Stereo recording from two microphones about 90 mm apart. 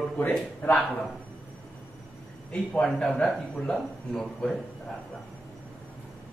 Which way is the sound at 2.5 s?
10° left (ahead or behind).